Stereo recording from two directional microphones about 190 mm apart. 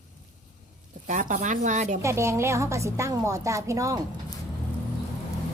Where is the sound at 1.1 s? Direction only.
40° right (ahead or behind).